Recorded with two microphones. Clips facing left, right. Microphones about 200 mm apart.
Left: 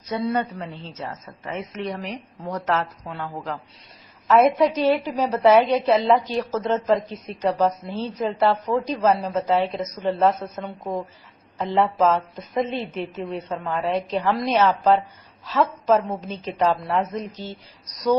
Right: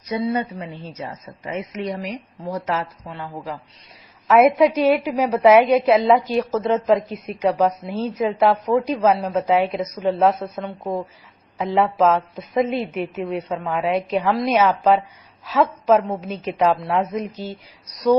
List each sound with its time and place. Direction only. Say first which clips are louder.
0.3 s a woman's voice: right 1 dB; 10° right (ahead or behind)
17.3 s speech: right 4 dB; 40° right (ahead or behind)
17.9 s a woman's voice: right 4 dB; centre (ahead or behind)